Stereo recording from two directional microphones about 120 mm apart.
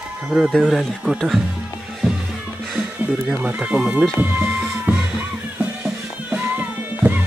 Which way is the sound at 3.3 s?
15° right (ahead or behind).